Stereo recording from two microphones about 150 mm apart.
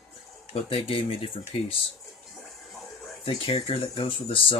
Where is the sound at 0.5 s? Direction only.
40° left (ahead or behind).